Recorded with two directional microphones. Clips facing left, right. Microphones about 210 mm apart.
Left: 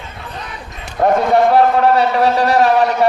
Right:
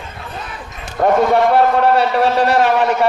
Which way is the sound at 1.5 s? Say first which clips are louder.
Left 1 dB; 40° left (ahead or behind).